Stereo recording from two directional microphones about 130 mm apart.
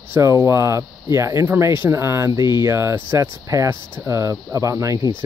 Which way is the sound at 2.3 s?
35° left (ahead or behind).